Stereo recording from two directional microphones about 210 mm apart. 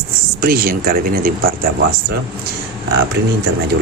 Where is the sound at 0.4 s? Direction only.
45° right (ahead or behind).